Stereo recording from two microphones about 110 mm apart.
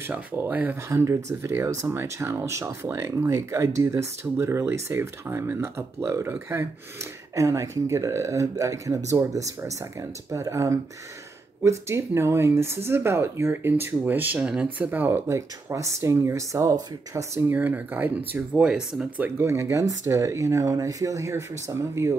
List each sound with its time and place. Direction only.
0.0 s speech: 15° right (ahead or behind)
0.9 s speech: 30° right (ahead or behind)
17.4 s speech: 15° right (ahead or behind)
19.2 s speech: 20° right (ahead or behind)